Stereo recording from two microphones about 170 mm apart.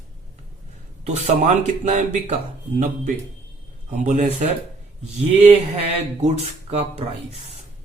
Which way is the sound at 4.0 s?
45° right (ahead or behind).